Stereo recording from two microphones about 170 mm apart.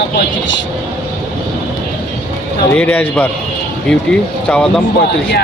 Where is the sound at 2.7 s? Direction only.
10° left (ahead or behind).